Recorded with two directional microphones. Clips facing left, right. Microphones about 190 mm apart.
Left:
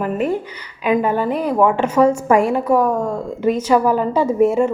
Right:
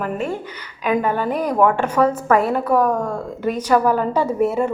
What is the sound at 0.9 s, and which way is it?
A woman's voice, 5° left (ahead or behind).